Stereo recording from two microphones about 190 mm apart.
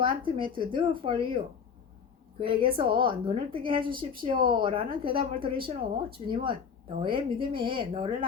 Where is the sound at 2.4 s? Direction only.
25° right (ahead or behind).